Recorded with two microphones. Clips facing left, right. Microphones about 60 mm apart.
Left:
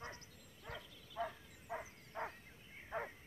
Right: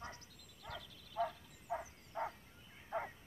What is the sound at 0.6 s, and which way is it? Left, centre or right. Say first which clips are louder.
Dog: right 1 dB; left.